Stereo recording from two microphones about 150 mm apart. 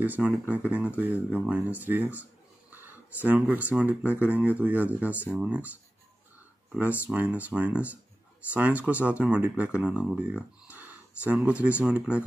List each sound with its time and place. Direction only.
0.0 s speech: 10° right (ahead or behind)
6.8 s speech: 10° right (ahead or behind)